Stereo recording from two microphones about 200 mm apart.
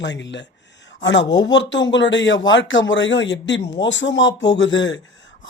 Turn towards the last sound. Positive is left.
turn(degrees=70)  # may be behind; listen again after turning